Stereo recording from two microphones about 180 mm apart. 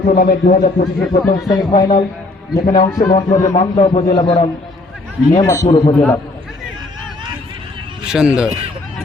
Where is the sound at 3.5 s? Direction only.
35° left (ahead or behind); by 5.8 s 20° left (ahead or behind).